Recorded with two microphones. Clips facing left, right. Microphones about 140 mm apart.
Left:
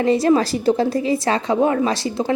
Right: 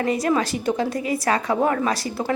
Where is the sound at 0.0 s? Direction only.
30° left (ahead or behind).